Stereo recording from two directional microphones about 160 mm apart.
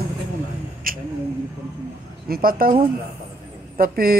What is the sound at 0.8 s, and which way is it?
Speech, 60° right (ahead or behind).